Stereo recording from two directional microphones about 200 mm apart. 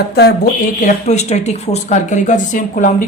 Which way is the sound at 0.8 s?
35° left (ahead or behind).